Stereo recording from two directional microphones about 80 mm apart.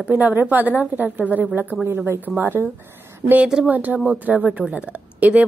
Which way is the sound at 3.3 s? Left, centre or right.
Centre.